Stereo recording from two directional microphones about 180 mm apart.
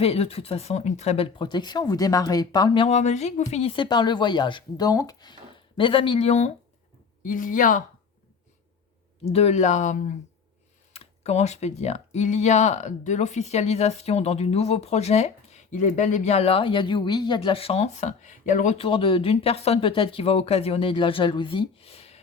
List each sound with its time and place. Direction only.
0.0 s speech: 35° left (ahead or behind)
7.2 s speech: 50° left (ahead or behind)
9.2 s speech: 35° left (ahead or behind)